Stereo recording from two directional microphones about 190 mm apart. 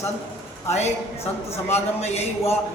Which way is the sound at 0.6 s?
35° left (ahead or behind).